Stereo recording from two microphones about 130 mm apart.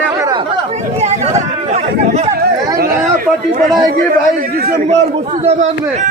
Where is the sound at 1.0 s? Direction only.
60° right (ahead or behind).